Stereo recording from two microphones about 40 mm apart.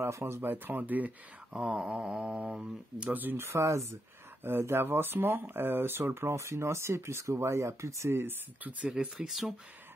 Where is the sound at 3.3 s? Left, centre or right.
Right.